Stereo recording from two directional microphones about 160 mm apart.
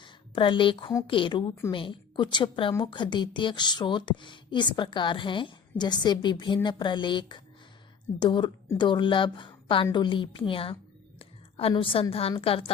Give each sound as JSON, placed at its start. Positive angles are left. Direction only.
{"t": 0.0, "sound": "a woman's voice", "side_deg": 30}
{"t": 11.2, "sound": "a sound", "side_deg": 35}
{"t": 12.4, "sound": "a woman's voice", "side_deg": 35}